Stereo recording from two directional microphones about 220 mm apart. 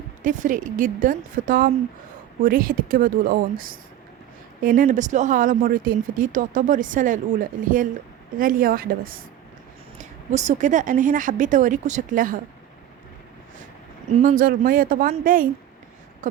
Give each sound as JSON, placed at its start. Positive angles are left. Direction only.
{"t": 0.2, "sound": "speech", "side_deg": -35}
{"t": 8.4, "sound": "speech", "side_deg": -40}
{"t": 14.1, "sound": "speech", "side_deg": -35}
{"t": 16.2, "sound": "a sound", "side_deg": -35}